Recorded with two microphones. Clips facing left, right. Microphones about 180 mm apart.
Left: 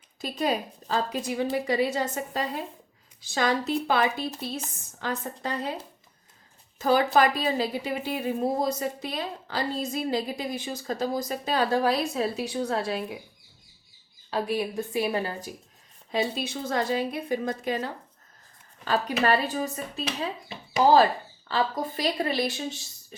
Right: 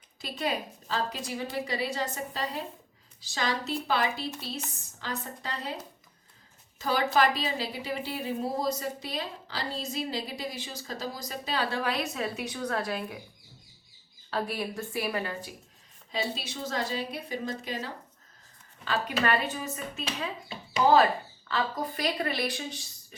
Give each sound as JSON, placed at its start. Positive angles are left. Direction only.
{"t": 0.2, "sound": "a woman's voice", "side_deg": 45}
{"t": 6.7, "sound": "a woman's voice", "side_deg": 45}
{"t": 14.3, "sound": "speech", "side_deg": 15}
{"t": 16.1, "sound": "a woman's voice", "side_deg": 50}
{"t": 18.9, "sound": "speech", "side_deg": 35}